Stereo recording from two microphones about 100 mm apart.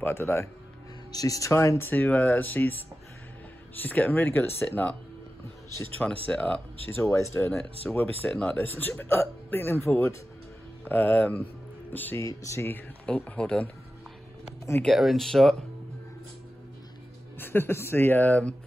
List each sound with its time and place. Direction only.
0.0 s speech: 25° left (ahead or behind)
1.1 s speech: 35° left (ahead or behind); by 2.7 s 20° left (ahead or behind)
3.7 s speech: 20° left (ahead or behind)
6.0 s speech: 10° left (ahead or behind)
7.0 s speech: 30° left (ahead or behind)
7.9 s speech: 15° left (ahead or behind)
12.2 s speech: 30° left (ahead or behind); by 13.7 s 10° left (ahead or behind)
14.8 s speech: centre (ahead or behind)
17.4 s speech: 20° left (ahead or behind)